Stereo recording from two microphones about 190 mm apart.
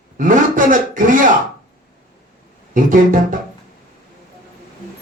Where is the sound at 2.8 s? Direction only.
45° right (ahead or behind).